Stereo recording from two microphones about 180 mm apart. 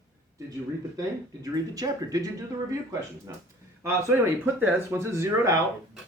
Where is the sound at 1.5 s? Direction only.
20° right (ahead or behind).